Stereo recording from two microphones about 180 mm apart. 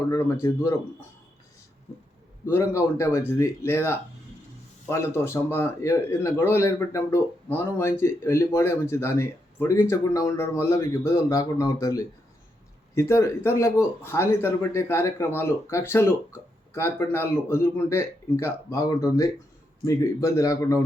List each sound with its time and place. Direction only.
0.1 s speech: 15° left (ahead or behind)
2.5 s speech: 15° left (ahead or behind)